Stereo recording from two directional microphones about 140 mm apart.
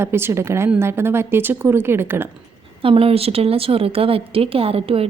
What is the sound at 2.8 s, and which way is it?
Speech, 40° right (ahead or behind).